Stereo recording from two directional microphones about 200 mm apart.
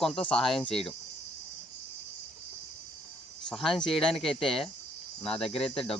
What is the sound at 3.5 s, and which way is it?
Speech, centre (ahead or behind).